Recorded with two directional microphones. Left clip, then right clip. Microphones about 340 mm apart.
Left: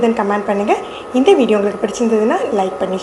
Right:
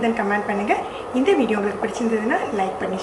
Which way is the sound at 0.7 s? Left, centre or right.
Centre.